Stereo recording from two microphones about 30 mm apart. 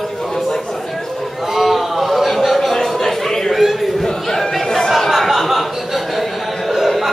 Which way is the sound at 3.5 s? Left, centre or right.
Centre.